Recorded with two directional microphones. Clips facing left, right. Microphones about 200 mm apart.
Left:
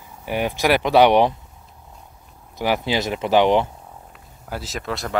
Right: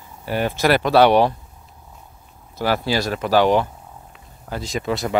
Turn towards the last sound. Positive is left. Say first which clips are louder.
# right 5 dB
turn(degrees=0)  # may be behind; listen again after turning